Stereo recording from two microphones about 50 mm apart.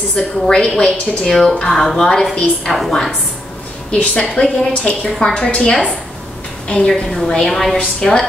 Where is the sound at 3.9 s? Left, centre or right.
Left.